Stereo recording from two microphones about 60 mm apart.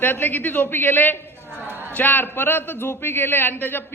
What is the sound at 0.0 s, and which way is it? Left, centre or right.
A man's voice, left.